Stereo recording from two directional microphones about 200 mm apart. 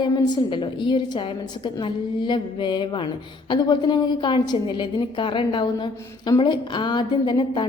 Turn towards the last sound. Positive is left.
turn(degrees=20)  # may be behind; listen again after turning